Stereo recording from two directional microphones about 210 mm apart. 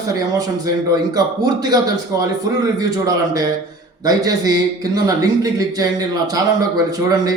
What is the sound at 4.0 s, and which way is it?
A man's voice, 15° right (ahead or behind).